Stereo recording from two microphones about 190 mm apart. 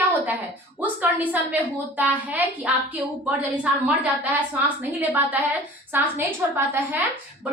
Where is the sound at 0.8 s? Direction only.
10° right (ahead or behind).